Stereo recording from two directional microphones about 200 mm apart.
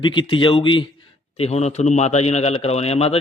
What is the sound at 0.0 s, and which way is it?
A man's voice, 25° left (ahead or behind).